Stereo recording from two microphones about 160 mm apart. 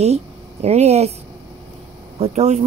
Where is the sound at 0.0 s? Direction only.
40° right (ahead or behind).